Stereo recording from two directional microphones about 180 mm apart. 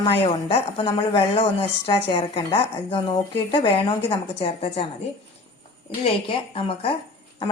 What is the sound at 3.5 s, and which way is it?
A woman's voice, 30° left (ahead or behind).